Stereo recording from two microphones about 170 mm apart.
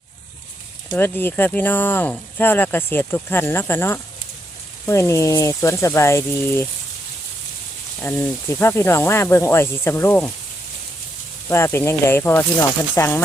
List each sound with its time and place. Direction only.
0.9 s speech: 10° left (ahead or behind)
8.0 s speech: 15° left (ahead or behind)
11.4 s speech: 15° left (ahead or behind)